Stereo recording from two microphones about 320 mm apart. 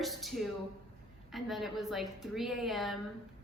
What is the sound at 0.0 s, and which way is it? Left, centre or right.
A woman's voice, centre.